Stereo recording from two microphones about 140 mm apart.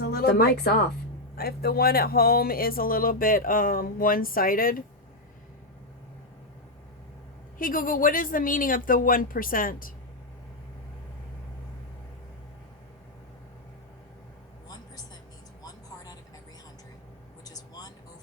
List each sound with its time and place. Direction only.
0.0 s a sound: 90° left
1.4 s speech: 90° left
7.6 s speech: 80° left
17.4 s vehicle: 25° left (ahead or behind)